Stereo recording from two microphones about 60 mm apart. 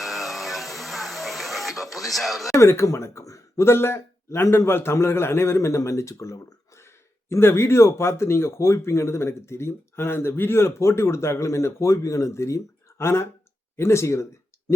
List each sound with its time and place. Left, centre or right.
0.0 s a sound: centre
2.5 s speech: left
3.7 s a man's voice: left
7.3 s speech: left